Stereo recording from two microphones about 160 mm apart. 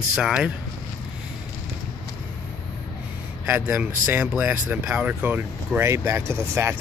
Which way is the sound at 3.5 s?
10° right (ahead or behind).